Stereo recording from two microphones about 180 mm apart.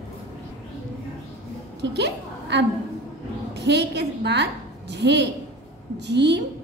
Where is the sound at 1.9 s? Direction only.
70° right (ahead or behind).